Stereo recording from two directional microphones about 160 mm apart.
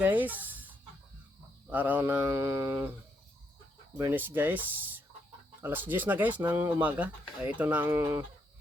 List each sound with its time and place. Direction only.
0.0 s speech: 10° right (ahead or behind)
1.7 s speech: 10° right (ahead or behind)
3.9 s speech: 15° right (ahead or behind)